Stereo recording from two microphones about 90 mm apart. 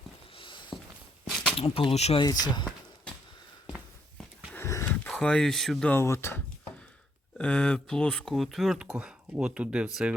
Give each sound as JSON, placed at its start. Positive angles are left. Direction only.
{"t": 0.3, "sound": "a sound", "side_deg": 65}
{"t": 1.5, "sound": "speech", "side_deg": 90}
{"t": 2.2, "sound": "speech", "side_deg": 45}
{"t": 4.5, "sound": "a sound", "side_deg": 30}
{"t": 5.1, "sound": "speech", "side_deg": 10}
{"t": 5.9, "sound": "speech", "side_deg": 25}
{"t": 7.3, "sound": "speech", "side_deg": 10}